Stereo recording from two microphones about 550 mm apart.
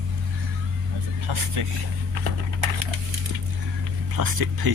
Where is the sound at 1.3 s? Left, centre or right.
Right.